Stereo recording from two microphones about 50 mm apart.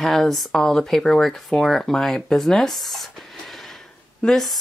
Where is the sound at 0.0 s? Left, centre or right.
Centre.